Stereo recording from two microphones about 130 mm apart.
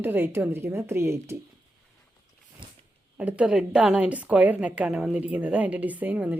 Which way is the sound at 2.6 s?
40° right (ahead or behind).